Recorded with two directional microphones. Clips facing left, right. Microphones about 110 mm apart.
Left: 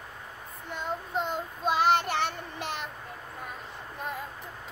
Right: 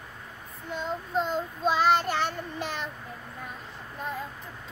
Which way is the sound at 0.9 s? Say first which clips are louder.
Right 2 dB; 10° left (ahead or behind).